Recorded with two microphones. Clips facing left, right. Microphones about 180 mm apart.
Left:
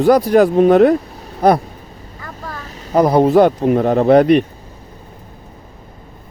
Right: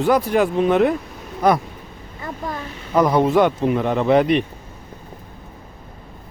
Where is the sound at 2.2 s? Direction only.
20° right (ahead or behind).